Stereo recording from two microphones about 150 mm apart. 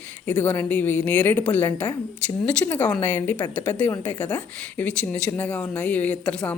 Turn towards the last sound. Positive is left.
turn(degrees=10)  # may be behind; listen again after turning